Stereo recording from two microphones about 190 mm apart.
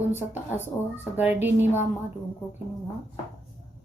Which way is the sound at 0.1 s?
10° right (ahead or behind).